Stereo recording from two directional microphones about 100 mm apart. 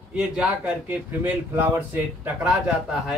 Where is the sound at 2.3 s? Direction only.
5° right (ahead or behind).